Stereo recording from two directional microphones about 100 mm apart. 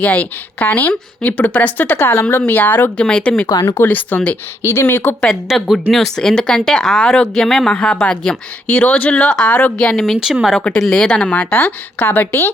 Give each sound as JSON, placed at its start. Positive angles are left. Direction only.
{"t": 0.0, "sound": "speech", "side_deg": 15}
{"t": 2.0, "sound": "speech", "side_deg": 25}
{"t": 3.4, "sound": "speech", "side_deg": 30}
{"t": 3.8, "sound": "speech", "side_deg": 15}
{"t": 4.6, "sound": "speech", "side_deg": 25}
{"t": 5.5, "sound": "speech", "side_deg": 0}